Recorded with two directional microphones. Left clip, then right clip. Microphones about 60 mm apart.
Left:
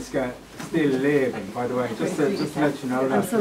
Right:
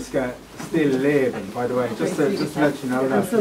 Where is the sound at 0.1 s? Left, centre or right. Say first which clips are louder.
Right 2 dB; centre.